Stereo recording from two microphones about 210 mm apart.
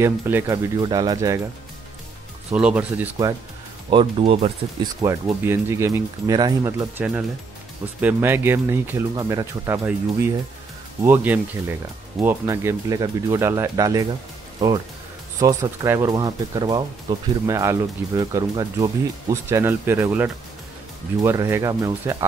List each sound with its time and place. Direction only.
0.0 s speech: 10° right (ahead or behind)
2.5 s speech: 5° right (ahead or behind)
3.9 s speech: 25° right (ahead or behind)
5.0 s speech: 10° right (ahead or behind)
15.4 s speech: 15° right (ahead or behind)